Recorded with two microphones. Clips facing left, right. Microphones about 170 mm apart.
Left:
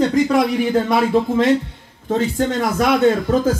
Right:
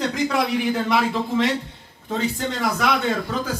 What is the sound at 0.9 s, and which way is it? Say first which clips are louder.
A man's voice: left 5 dB; 45° left (ahead or behind).